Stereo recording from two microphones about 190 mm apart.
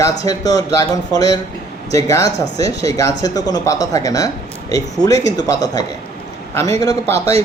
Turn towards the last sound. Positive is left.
turn(degrees=-30)  # may be behind; listen again after turning